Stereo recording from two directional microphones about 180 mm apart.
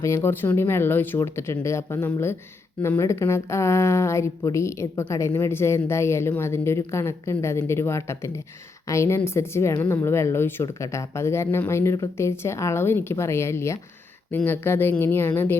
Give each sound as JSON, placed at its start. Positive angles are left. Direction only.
{"t": 0.0, "sound": "a woman's voice", "side_deg": 15}